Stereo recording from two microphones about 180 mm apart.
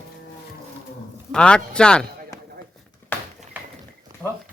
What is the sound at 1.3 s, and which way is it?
Speech, 5° left (ahead or behind).